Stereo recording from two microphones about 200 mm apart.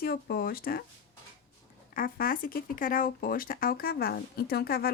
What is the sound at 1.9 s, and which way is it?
Speech, 45° left (ahead or behind).